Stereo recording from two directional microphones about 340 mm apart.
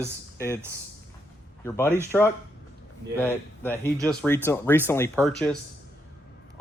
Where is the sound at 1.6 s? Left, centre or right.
Centre.